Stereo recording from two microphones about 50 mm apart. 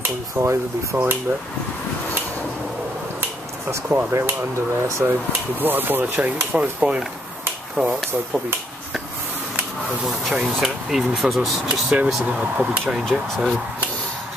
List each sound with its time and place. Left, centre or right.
0.4 s speech: right
4.1 s speech: right
4.8 s speech: right
5.6 s speech: right
6.1 s speech: right
10.0 s speech: centre
12.3 s speech: right
13.1 s speech: centre